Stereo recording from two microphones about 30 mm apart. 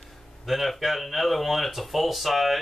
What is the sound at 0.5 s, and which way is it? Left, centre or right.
Speech, centre.